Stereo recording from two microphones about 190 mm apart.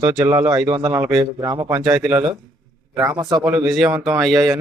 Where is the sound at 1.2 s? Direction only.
20° right (ahead or behind).